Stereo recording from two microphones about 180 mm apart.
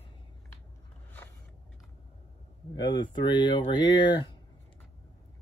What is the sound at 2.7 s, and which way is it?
Speech, 25° left (ahead or behind).